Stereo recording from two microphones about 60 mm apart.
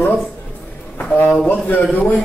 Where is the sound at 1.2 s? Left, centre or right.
Left.